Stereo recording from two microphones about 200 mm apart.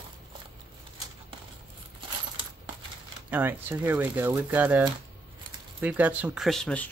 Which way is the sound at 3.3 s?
10° right (ahead or behind).